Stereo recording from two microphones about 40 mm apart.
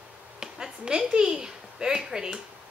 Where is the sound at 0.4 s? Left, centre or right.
Centre.